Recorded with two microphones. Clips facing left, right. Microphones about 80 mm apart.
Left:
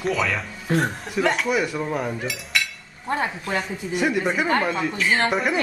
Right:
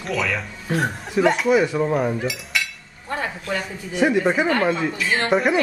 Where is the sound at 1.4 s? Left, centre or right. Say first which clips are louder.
Right 5 dB; right.